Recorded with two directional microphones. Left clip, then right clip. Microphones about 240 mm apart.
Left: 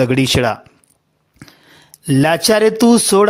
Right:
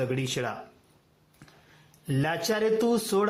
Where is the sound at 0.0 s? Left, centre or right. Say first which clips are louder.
Left 15 dB; left.